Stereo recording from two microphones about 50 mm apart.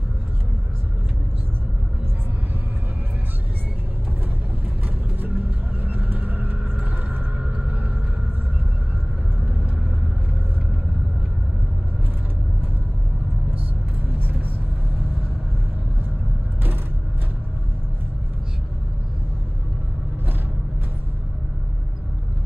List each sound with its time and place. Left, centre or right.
5.2 s vehicle: right
14.0 s vehicle: right